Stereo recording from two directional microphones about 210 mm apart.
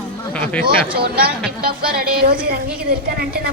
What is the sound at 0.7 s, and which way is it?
A woman's voice, 45° right (ahead or behind).